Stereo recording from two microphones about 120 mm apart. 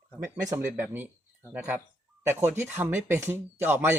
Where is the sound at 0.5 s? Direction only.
20° right (ahead or behind).